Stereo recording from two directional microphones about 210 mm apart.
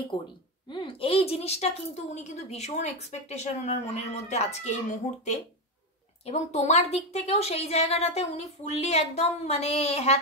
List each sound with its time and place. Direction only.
0.1 s a woman's voice: 20° left (ahead or behind)
6.2 s a woman's voice: 35° left (ahead or behind)